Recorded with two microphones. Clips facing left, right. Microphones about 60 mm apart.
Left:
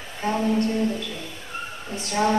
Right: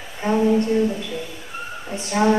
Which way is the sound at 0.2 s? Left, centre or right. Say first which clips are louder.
Right 4 dB; centre.